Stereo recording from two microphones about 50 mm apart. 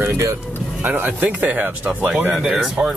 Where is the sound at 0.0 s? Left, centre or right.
Right.